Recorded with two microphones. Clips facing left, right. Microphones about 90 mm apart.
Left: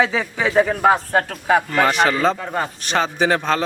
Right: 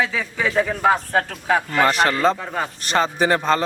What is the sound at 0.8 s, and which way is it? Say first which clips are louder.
A man's voice: left 2 dB; 5° left (ahead or behind).